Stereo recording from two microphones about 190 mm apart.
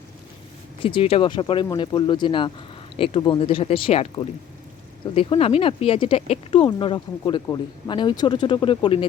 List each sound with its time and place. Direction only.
0.8 s speech: 30° left (ahead or behind)